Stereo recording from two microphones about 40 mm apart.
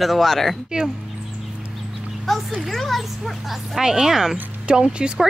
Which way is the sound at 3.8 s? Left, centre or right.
Centre.